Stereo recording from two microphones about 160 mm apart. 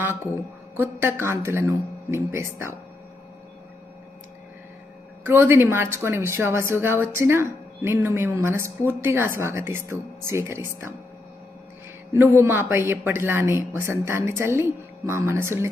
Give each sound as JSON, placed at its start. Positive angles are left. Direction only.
{"t": 0.8, "sound": "speech", "side_deg": -15}
{"t": 5.2, "sound": "speech", "side_deg": -15}
{"t": 12.1, "sound": "speech", "side_deg": -15}